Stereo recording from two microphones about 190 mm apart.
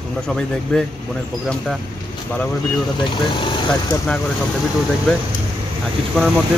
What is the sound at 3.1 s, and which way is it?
Speech, 25° left (ahead or behind).